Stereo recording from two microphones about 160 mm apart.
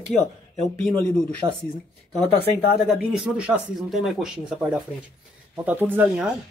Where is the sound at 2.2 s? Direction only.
40° left (ahead or behind).